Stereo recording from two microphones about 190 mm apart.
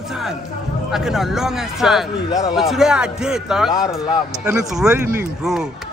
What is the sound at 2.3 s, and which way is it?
Speech, 20° left (ahead or behind).